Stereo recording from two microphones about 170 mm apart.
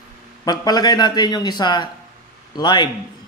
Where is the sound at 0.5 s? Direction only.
25° left (ahead or behind).